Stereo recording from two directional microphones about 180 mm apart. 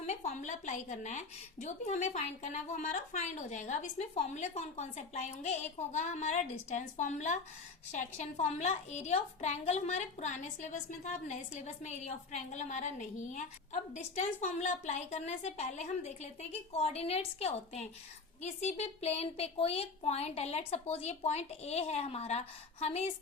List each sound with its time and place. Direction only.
0.0 s a woman's voice: 35° left (ahead or behind)